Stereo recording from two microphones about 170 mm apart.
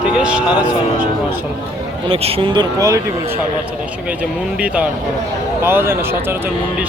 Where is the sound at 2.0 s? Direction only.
35° right (ahead or behind).